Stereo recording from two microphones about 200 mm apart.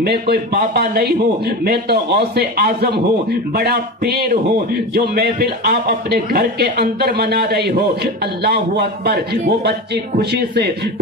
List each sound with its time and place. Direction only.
0.0 s a man's voice: 50° right (ahead or behind)